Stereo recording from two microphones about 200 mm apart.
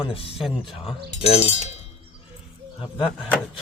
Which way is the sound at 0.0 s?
30° left (ahead or behind).